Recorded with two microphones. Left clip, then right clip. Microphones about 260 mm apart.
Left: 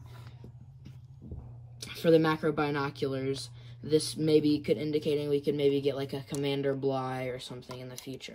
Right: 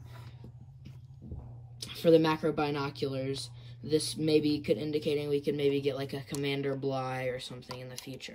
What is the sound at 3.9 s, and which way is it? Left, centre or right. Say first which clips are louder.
Speech: left 2 dB; centre.